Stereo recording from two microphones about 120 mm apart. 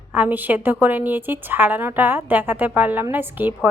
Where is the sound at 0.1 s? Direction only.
15° right (ahead or behind).